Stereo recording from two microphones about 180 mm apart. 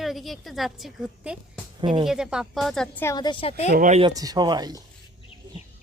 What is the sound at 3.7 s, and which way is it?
Speech, 45° right (ahead or behind).